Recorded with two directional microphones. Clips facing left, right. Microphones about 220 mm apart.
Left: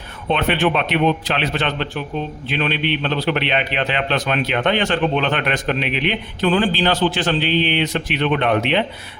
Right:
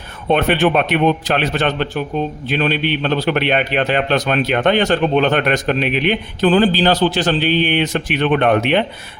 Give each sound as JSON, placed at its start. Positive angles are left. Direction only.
{"t": 0.3, "sound": "a man's voice", "side_deg": -45}